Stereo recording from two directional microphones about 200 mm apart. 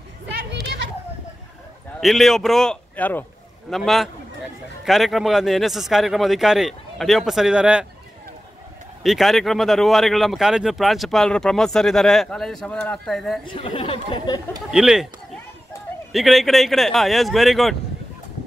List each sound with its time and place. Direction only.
0.5 s children playing: 60° right (ahead or behind)
2.0 s speech: centre (ahead or behind)
9.0 s speech: centre (ahead or behind)
13.5 s speech: 25° left (ahead or behind)
14.7 s speech: 5° right (ahead or behind)
16.1 s speech: centre (ahead or behind)